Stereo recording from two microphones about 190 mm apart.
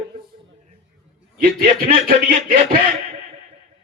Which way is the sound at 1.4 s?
45° right (ahead or behind).